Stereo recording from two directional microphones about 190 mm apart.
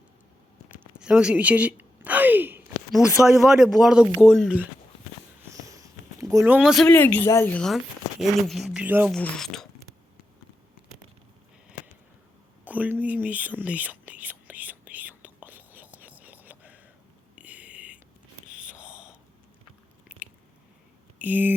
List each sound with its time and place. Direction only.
0.9 s speech: 5° right (ahead or behind)
5.4 s a sound: 15° right (ahead or behind)
6.8 s speech: 10° left (ahead or behind); by 9.1 s 10° right (ahead or behind)
9.1 s speech: 5° left (ahead or behind)
12.6 s whispering: 10° right (ahead or behind)
17.3 s a sound: 10° right (ahead or behind)
20.1 s biting: 5° right (ahead or behind)
21.2 s speech: 10° right (ahead or behind)